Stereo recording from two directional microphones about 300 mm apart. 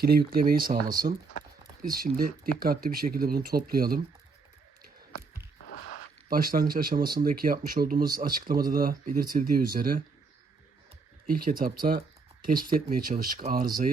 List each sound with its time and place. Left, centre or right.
0.0 s speech: right
0.8 s speech: centre
1.9 s speech: right
5.5 s a sound: left
6.2 s speech: right
11.3 s speech: right